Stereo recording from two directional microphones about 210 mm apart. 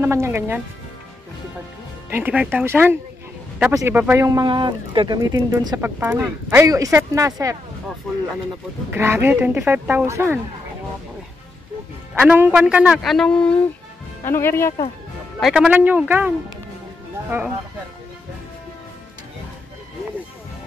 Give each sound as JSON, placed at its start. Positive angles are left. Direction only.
{"t": 0.0, "sound": "speech", "side_deg": -15}
{"t": 2.0, "sound": "speech", "side_deg": -10}
{"t": 8.9, "sound": "speech", "side_deg": -10}
{"t": 12.2, "sound": "a man's voice", "side_deg": -10}
{"t": 15.4, "sound": "speech", "side_deg": 0}